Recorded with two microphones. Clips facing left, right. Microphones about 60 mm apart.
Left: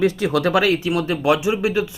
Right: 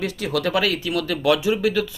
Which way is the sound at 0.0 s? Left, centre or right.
Left.